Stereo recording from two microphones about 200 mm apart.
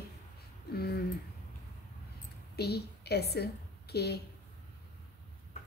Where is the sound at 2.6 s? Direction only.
55° left (ahead or behind).